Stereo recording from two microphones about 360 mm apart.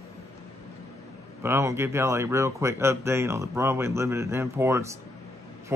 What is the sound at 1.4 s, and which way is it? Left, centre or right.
Speech, centre.